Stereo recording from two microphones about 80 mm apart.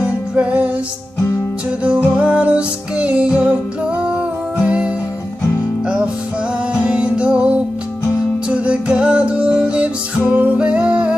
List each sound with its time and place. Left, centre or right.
0.0 s music: centre
2.1 s music: centre
4.6 s music: centre
6.7 s music: centre